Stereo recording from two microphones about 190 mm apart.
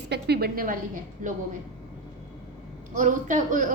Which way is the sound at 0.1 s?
60° right (ahead or behind).